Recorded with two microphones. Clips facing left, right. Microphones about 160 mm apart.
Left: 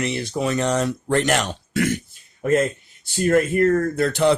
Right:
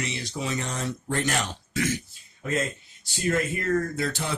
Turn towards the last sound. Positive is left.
turn(degrees=60)  # may be behind; listen again after turning